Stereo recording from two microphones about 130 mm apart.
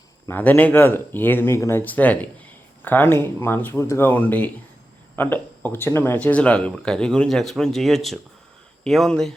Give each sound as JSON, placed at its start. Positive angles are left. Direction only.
{"t": 0.3, "sound": "speech", "side_deg": 15}